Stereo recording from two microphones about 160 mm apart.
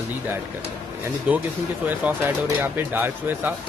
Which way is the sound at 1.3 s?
10° right (ahead or behind).